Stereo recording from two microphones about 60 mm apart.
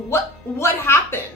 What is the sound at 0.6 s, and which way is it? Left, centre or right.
Speech, left.